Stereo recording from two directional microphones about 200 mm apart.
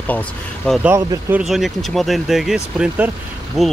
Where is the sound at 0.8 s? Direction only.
10° right (ahead or behind).